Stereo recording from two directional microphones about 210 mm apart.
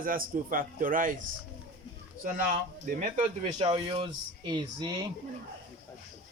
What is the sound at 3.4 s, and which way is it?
Speech, 25° right (ahead or behind).